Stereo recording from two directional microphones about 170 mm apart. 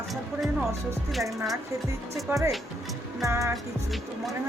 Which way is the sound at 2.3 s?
15° right (ahead or behind).